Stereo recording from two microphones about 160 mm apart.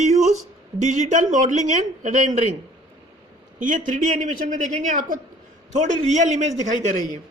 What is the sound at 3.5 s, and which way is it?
A man's voice, 55° right (ahead or behind).